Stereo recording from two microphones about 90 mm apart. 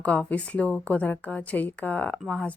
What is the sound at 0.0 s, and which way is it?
A woman's voice, 15° left (ahead or behind).